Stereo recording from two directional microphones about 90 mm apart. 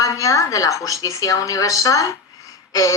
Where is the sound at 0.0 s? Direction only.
40° left (ahead or behind).